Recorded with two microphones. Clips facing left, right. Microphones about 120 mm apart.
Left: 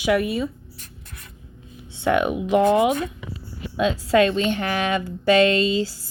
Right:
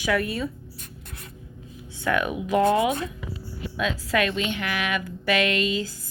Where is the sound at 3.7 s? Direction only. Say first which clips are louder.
Left 7 dB; 30° left (ahead or behind).